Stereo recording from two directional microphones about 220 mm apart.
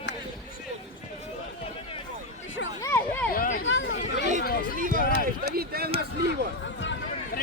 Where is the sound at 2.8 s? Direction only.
10° left (ahead or behind).